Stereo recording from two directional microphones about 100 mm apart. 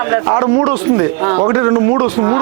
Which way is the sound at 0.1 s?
25° right (ahead or behind).